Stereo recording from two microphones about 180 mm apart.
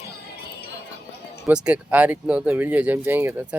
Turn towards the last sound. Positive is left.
turn(degrees=-10)  # may be behind; listen again after turning